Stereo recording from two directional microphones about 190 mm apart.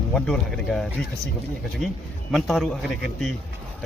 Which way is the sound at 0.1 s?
Centre (ahead or behind).